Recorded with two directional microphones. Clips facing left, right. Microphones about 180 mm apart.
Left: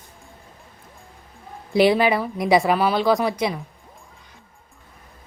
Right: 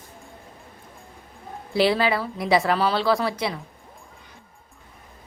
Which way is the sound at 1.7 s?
15° left (ahead or behind).